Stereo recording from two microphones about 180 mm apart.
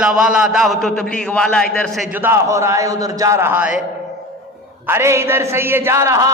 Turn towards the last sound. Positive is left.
turn(degrees=-15)  # may be behind; listen again after turning